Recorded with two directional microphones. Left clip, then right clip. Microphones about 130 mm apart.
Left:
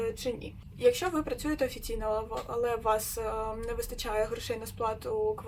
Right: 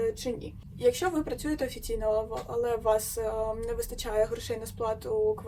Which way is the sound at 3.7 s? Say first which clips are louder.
Right 2 dB; 10° left (ahead or behind).